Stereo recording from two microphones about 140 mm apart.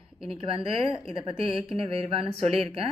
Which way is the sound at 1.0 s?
40° right (ahead or behind).